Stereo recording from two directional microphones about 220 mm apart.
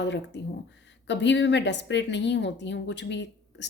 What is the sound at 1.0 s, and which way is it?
A woman's voice, 55° left (ahead or behind).